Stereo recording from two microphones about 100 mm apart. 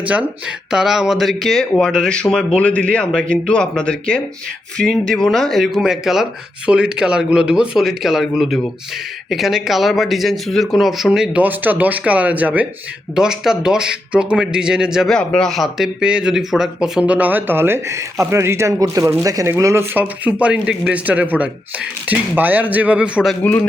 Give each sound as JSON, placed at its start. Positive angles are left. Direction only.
{"t": 0.0, "sound": "speech", "side_deg": -15}
{"t": 11.4, "sound": "speech", "side_deg": -20}
{"t": 15.1, "sound": "speech", "side_deg": 5}
{"t": 23.4, "sound": "speech", "side_deg": 15}